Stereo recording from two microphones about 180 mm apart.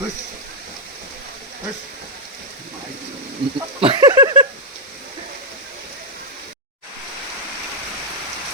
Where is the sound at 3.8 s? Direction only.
25° right (ahead or behind).